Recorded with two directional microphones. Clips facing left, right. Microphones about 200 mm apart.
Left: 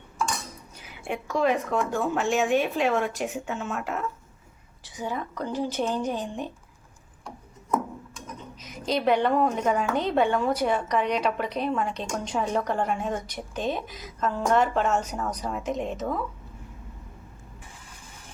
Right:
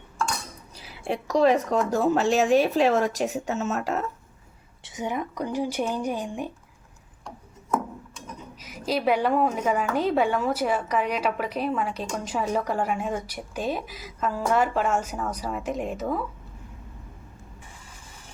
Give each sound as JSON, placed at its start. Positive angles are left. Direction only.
{"t": 0.8, "sound": "a woman's voice", "side_deg": -35}
{"t": 4.8, "sound": "speech", "side_deg": -20}
{"t": 8.6, "sound": "a woman's voice", "side_deg": -5}